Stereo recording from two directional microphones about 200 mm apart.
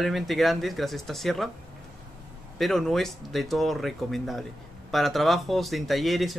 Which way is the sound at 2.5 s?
Centre (ahead or behind).